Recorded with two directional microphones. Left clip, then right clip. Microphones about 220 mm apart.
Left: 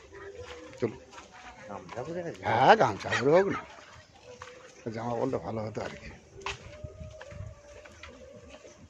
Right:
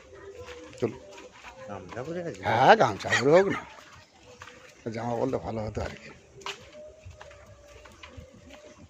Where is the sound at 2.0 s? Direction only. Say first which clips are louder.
Right 1 dB; 50° right (ahead or behind).